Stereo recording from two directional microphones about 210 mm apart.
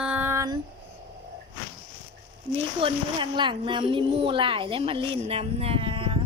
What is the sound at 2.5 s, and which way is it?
Speech, 25° right (ahead or behind).